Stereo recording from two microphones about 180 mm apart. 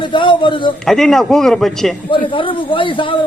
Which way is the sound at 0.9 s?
Centre (ahead or behind).